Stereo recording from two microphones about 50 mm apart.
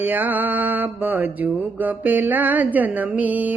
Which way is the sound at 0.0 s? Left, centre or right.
Right.